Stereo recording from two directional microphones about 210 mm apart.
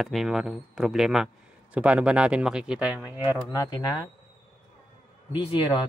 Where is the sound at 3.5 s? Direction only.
15° left (ahead or behind).